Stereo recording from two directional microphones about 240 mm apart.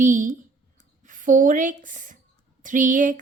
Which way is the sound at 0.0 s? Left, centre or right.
Right.